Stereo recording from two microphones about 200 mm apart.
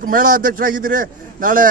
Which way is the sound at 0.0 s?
40° right (ahead or behind).